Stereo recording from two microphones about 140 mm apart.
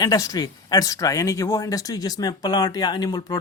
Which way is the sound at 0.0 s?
25° left (ahead or behind).